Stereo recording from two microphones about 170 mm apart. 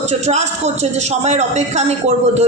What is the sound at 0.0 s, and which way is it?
A woman's voice, 40° right (ahead or behind).